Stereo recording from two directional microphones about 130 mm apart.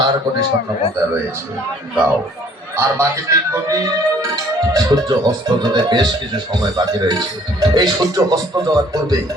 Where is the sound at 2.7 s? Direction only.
20° right (ahead or behind).